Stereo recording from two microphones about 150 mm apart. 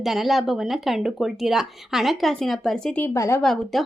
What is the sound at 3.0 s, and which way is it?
Speech, 20° left (ahead or behind).